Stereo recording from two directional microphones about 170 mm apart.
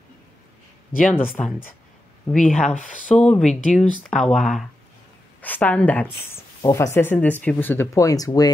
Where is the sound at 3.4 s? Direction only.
50° left (ahead or behind).